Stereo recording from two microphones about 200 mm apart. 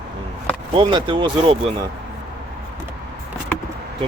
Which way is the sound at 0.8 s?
25° right (ahead or behind).